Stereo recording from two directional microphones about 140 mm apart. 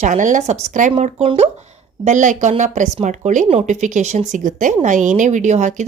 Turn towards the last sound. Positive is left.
turn(degrees=-55)  # may be behind; listen again after turning